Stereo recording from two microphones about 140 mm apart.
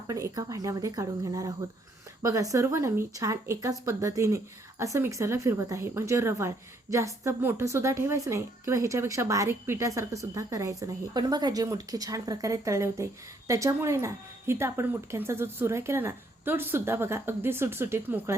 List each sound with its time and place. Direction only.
0.1 s a woman's voice: 25° right (ahead or behind)